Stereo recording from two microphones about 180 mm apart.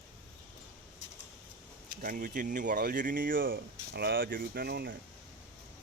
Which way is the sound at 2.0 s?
50° right (ahead or behind).